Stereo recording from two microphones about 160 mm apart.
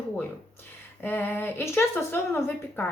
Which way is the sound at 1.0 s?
15° left (ahead or behind).